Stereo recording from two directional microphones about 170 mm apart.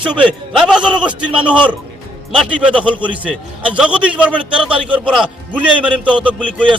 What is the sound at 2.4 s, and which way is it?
A man's voice, 5° right (ahead or behind).